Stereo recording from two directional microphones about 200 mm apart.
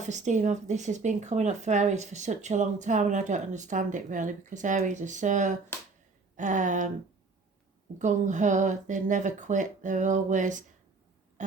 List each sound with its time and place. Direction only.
0.0 s speech: 35° right (ahead or behind)
7.9 s speech: 35° right (ahead or behind)
11.4 s owl: 35° right (ahead or behind)